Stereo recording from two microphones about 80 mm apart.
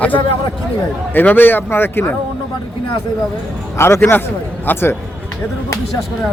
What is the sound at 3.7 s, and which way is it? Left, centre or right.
Speech, left.